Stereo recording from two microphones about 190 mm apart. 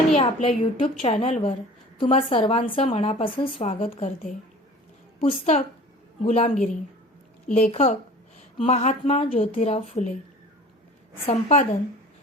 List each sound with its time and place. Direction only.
0.2 s a woman's voice: 30° left (ahead or behind)
5.3 s a woman's voice: 35° left (ahead or behind)
11.3 s a woman's voice: 35° left (ahead or behind)